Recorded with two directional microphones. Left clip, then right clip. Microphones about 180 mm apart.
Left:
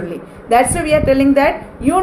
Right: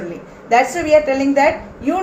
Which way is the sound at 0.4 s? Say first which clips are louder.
Left 1 dB; 60° left (ahead or behind).